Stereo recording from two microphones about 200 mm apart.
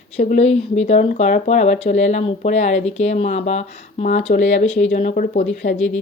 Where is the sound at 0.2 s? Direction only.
35° left (ahead or behind).